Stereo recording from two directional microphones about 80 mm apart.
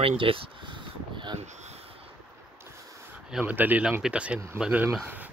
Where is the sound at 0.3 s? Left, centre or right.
Right.